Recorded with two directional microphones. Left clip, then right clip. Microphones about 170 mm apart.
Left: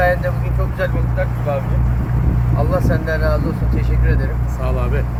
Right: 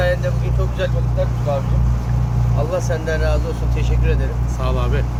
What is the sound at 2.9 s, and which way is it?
Speech, 25° right (ahead or behind).